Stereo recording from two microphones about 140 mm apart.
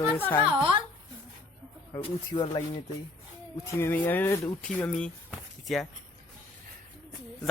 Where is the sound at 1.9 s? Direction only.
35° left (ahead or behind).